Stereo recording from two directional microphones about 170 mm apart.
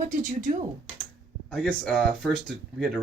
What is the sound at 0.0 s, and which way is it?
Speech, 50° right (ahead or behind).